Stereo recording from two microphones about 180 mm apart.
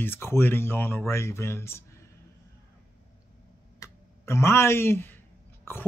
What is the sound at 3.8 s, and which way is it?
Clicking, 15° left (ahead or behind).